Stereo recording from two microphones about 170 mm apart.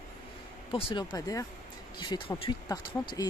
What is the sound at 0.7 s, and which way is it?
Speech, 30° left (ahead or behind).